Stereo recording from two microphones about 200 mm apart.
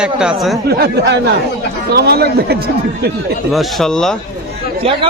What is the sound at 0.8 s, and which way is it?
Speech, 55° right (ahead or behind).